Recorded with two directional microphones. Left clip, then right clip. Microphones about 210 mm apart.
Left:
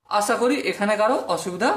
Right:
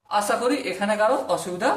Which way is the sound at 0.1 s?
35° left (ahead or behind).